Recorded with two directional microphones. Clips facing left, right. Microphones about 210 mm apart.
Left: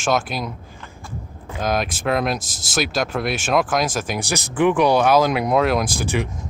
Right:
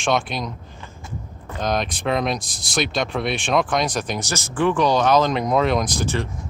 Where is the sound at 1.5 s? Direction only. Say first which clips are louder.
Left 1 dB; 5° left (ahead or behind).